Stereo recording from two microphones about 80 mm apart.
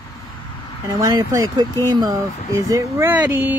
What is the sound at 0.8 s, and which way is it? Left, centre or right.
Speech, right.